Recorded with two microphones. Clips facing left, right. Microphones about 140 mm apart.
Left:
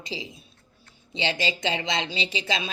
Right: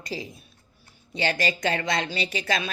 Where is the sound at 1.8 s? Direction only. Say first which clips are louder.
Right 2 dB; 50° right (ahead or behind).